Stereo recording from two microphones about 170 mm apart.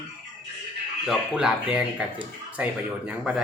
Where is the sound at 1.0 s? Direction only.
Centre (ahead or behind).